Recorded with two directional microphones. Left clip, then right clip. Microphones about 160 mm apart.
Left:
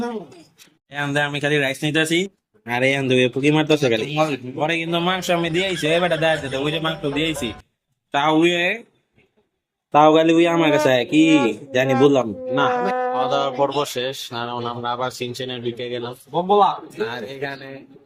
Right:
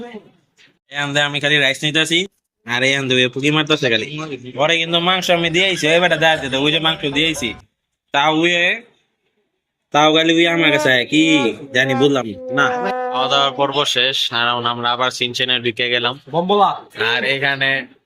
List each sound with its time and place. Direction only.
0.9 s speech: centre (ahead or behind)
4.1 s speech: 55° left (ahead or behind)
4.6 s a man's voice: 5° left (ahead or behind); by 6.9 s 25° right (ahead or behind)
7.0 s speech: 5° right (ahead or behind)
9.9 s speech: 5° right (ahead or behind)
12.7 s speech: centre (ahead or behind)